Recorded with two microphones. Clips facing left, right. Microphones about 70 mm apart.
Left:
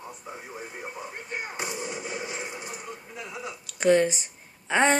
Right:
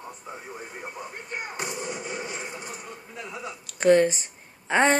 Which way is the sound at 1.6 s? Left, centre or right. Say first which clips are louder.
Right 2 dB; right.